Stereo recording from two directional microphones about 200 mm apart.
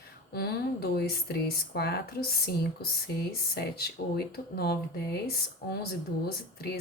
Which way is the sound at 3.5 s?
50° left (ahead or behind).